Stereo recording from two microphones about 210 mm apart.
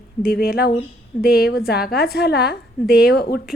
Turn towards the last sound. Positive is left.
turn(degrees=45)  # may be behind; listen again after turning